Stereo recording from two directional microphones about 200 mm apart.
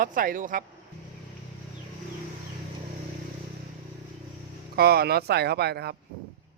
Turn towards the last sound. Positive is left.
turn(degrees=-55)  # may be behind; listen again after turning